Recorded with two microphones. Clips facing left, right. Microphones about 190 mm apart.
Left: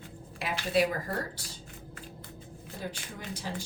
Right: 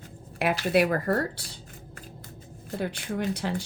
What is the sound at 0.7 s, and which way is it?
Speech, 65° right (ahead or behind).